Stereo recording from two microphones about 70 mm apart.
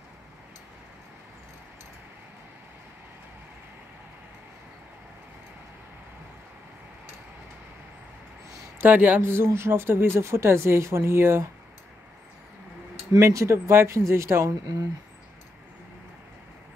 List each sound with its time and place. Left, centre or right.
8.7 s speech: right
13.1 s speech: right